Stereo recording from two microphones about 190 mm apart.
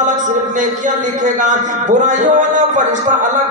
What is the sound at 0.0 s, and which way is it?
A man's voice, 40° right (ahead or behind).